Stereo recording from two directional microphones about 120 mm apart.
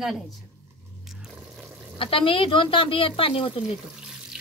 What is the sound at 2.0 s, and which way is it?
Speech, 45° left (ahead or behind).